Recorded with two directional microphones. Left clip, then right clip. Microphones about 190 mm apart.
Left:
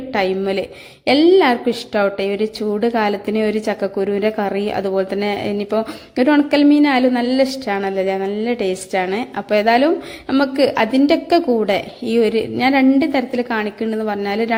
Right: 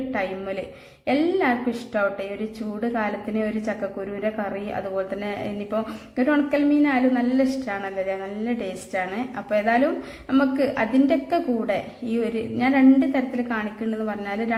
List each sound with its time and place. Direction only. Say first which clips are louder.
0.1 s a woman's voice: left 12 dB; 35° left (ahead or behind)